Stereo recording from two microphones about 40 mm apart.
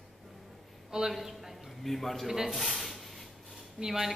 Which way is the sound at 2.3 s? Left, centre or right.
Centre.